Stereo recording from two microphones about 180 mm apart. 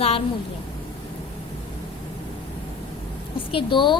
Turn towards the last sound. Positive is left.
turn(degrees=25)  # may be behind; listen again after turning